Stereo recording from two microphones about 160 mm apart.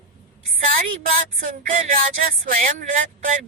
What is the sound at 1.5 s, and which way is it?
A woman's voice, 60° right (ahead or behind).